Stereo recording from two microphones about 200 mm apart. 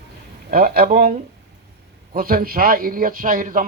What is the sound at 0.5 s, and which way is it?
Speech, 50° right (ahead or behind).